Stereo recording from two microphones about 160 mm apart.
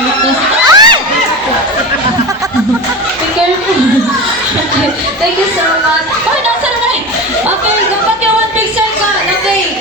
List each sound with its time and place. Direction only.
0.6 s crowd: 25° right (ahead or behind)